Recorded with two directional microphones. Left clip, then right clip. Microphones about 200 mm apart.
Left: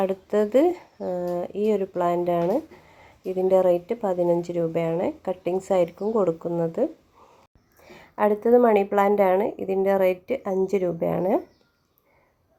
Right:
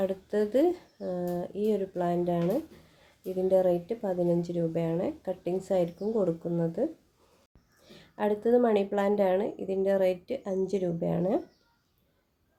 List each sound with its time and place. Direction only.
0.0 s a woman's voice: 15° left (ahead or behind)
7.9 s a woman's voice: 15° left (ahead or behind)